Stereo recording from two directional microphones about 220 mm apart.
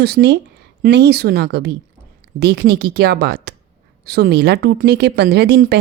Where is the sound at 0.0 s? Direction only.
50° right (ahead or behind).